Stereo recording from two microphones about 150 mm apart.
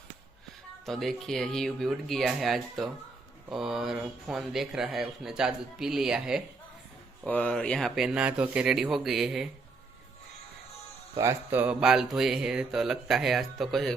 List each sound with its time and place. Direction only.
0.9 s speech: centre (ahead or behind)
7.3 s speech: 10° left (ahead or behind)
11.2 s speech: 15° right (ahead or behind); by 13.9 s centre (ahead or behind)